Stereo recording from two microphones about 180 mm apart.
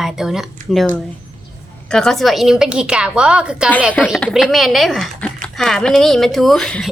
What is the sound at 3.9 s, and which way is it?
Speech, 5° left (ahead or behind).